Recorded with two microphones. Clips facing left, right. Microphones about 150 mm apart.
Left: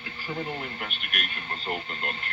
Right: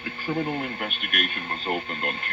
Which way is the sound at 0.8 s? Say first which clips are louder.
Right 6 dB; 50° right (ahead or behind).